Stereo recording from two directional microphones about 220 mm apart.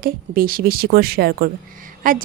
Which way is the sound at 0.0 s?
40° right (ahead or behind).